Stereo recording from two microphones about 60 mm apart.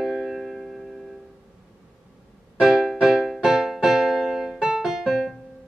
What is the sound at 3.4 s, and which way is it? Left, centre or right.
Keyboard, centre.